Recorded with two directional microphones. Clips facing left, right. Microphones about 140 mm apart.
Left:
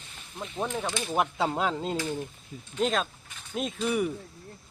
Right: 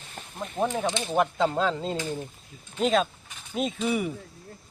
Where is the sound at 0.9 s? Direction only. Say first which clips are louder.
Right 4 dB; 20° right (ahead or behind).